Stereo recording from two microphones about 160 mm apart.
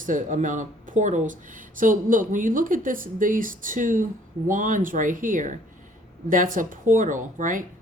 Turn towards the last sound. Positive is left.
turn(degrees=-55)  # may be behind; listen again after turning